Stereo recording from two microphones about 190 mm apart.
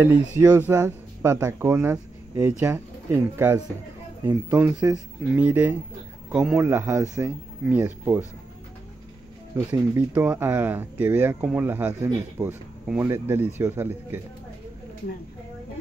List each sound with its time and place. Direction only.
0.4 s a man's voice: 10° right (ahead or behind)
9.7 s speech: 10° right (ahead or behind)